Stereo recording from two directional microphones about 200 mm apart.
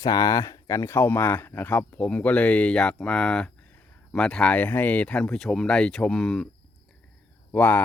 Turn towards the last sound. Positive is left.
turn(degrees=10)  # may be behind; listen again after turning